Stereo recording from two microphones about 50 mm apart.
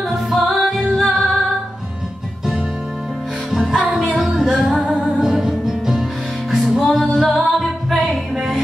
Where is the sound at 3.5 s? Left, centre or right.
Centre.